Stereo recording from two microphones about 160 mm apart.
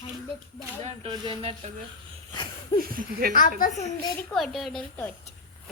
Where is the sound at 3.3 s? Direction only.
55° left (ahead or behind).